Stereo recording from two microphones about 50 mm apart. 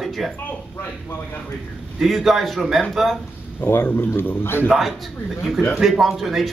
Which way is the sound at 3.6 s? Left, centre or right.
Left.